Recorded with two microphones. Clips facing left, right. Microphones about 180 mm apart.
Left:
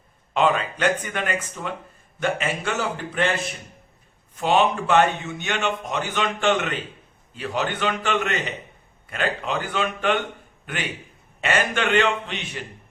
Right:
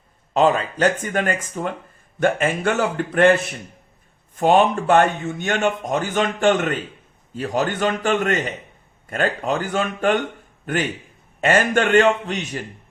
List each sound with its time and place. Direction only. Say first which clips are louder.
0.3 s speech: right 4 dB; 40° right (ahead or behind)
4.4 s speech: right 4 dB; 50° right (ahead or behind)
11.3 s speech: right 6 dB; 45° right (ahead or behind)